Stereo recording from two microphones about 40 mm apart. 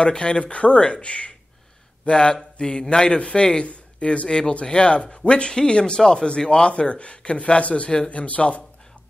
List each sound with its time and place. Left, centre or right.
0.0 s speech: left